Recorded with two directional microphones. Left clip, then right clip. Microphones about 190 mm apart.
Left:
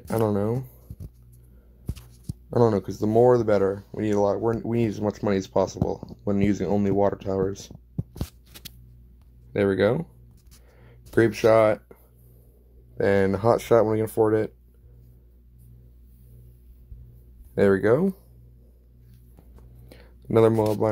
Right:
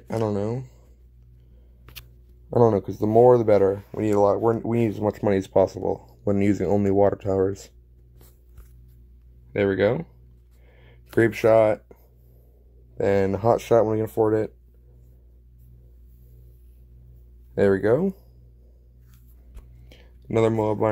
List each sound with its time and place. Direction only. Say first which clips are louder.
0.1 s speech: left 1 dB; centre (ahead or behind)
2.5 s speech: right 2 dB; 10° right (ahead or behind); by 7.7 s 25° right (ahead or behind)
9.5 s speech: even; centre (ahead or behind)
10.7 s a sound: even; centre (ahead or behind)
12.9 s speech: even; 10° right (ahead or behind)
17.6 s speech: even; 10° right (ahead or behind)
19.5 s a sound: left 1 dB; 5° left (ahead or behind)